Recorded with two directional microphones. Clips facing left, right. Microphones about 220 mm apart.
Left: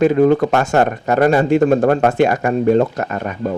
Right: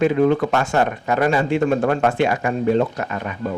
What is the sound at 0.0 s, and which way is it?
A man's voice, 40° left (ahead or behind).